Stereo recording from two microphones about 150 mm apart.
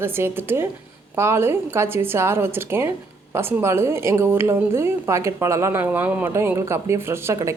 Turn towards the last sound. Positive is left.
turn(degrees=-20)  # may be behind; listen again after turning